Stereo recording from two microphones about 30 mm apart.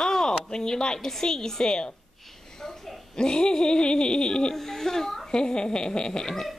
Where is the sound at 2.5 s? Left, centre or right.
Centre.